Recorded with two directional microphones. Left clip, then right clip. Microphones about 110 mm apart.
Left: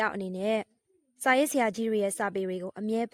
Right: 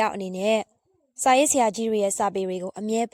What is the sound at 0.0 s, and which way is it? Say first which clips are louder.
A woman's voice: right 5 dB; 20° right (ahead or behind).